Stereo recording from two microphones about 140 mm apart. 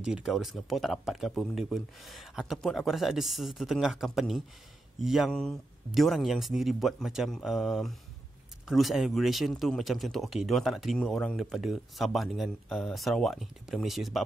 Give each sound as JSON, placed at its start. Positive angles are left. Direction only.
{"t": 0.0, "sound": "speech", "side_deg": -5}